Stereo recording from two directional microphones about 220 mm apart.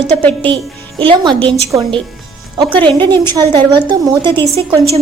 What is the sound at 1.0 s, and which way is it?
Speech, 20° right (ahead or behind).